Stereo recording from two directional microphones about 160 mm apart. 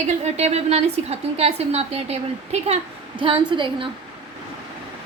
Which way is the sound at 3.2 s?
30° right (ahead or behind).